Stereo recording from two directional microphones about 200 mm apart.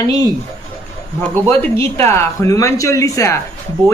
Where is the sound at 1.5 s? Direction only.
10° left (ahead or behind).